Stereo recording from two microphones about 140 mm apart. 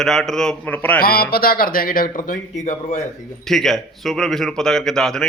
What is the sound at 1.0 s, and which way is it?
Speech, 90° left.